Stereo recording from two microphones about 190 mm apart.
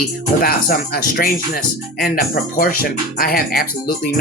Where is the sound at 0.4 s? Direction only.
50° left (ahead or behind).